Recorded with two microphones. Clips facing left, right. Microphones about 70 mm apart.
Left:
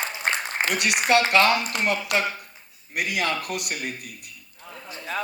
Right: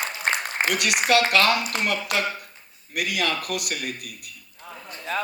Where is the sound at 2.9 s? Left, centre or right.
Left.